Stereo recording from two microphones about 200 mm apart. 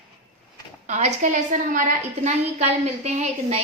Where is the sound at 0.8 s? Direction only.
35° right (ahead or behind).